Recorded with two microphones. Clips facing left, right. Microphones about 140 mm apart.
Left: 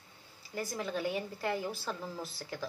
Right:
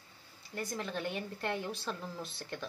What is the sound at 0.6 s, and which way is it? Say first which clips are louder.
A woman's voice: left 2 dB; 5° left (ahead or behind).